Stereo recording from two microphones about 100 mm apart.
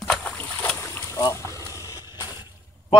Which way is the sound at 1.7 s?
35° left (ahead or behind).